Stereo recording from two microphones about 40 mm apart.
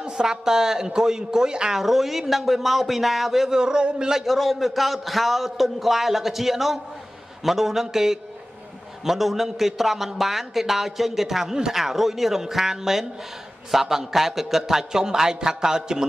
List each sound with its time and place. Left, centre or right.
0.0 s a man's voice: centre
1.7 s a man's voice: centre
3.4 s a man's voice: centre
4.2 s a man's voice: centre